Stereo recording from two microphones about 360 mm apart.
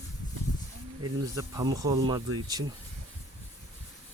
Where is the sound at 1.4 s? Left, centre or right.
Centre.